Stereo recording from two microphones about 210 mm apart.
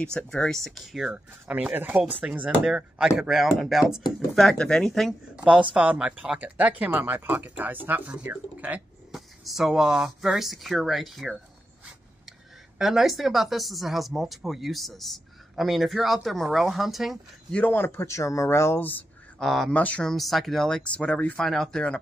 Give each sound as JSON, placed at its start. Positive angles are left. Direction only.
{"t": 0.0, "sound": "speech", "side_deg": 5}